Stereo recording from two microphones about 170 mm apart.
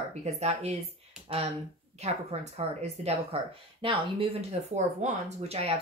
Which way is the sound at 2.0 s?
40° right (ahead or behind).